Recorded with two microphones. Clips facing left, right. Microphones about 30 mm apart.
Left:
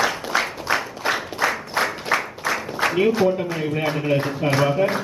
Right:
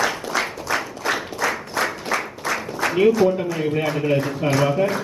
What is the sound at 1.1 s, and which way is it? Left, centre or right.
Clapping, centre.